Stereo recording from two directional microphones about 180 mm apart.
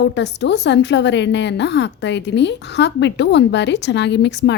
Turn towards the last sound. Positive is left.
turn(degrees=75)  # may be behind; listen again after turning